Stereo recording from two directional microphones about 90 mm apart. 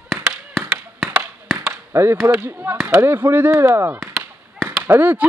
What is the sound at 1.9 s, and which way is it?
Speech, 25° right (ahead or behind).